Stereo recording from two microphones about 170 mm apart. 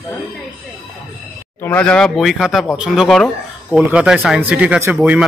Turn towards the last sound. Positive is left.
turn(degrees=-10)  # may be behind; listen again after turning